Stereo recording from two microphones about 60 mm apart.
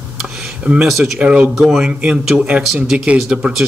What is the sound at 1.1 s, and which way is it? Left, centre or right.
A man's voice, centre.